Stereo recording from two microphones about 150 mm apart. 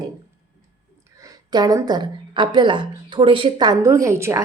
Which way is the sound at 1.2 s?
25° right (ahead or behind).